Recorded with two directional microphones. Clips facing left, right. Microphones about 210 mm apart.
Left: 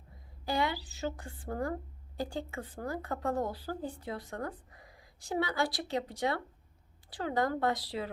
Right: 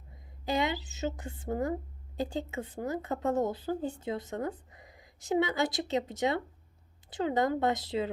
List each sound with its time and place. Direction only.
0.4 s a woman's voice: 20° right (ahead or behind)